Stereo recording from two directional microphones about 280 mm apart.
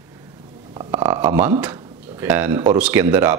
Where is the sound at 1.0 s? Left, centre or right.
Centre.